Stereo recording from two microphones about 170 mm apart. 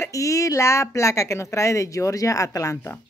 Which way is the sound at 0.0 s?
20° left (ahead or behind).